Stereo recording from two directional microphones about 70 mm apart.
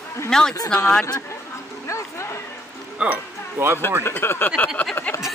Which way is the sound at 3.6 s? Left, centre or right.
Right.